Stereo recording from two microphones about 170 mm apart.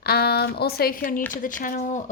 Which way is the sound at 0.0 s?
70° left (ahead or behind).